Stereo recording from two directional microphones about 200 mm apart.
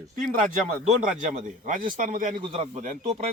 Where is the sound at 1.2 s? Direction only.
40° right (ahead or behind).